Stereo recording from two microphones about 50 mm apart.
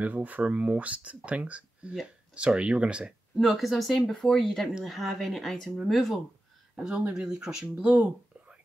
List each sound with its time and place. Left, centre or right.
0.0 s speech: right
3.3 s speech: centre
4.2 s speech: centre
4.8 s speech: centre
6.8 s speech: centre
7.8 s speech: right